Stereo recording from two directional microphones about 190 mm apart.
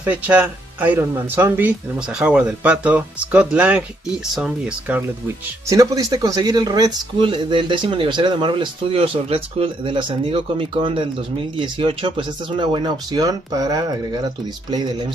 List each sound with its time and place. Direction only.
0.0 s speech: 5° right (ahead or behind)
5.7 s speech: 15° right (ahead or behind)